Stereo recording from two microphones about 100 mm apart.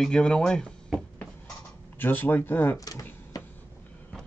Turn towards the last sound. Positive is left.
turn(degrees=40)  # may be behind; listen again after turning